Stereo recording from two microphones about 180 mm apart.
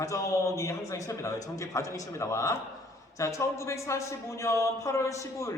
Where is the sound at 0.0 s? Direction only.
15° left (ahead or behind).